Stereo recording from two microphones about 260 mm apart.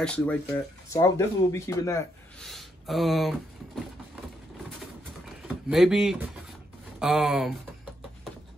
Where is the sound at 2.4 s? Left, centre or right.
Centre.